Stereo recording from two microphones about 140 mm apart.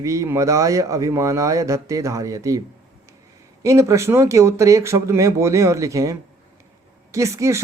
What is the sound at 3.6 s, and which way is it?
Speech, 20° right (ahead or behind).